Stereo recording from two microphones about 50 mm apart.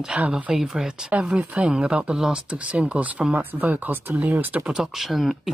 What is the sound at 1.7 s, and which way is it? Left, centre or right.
Speech, centre.